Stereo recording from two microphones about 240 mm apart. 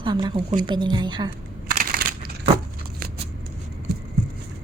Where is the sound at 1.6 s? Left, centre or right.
Right.